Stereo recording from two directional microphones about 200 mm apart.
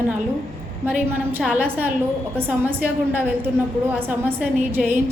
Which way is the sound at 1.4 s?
Centre (ahead or behind).